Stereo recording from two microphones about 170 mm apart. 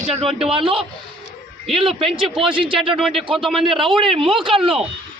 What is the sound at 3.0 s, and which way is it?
Speech, centre (ahead or behind).